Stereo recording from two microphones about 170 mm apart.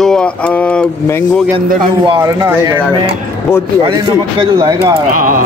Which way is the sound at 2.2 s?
15° right (ahead or behind).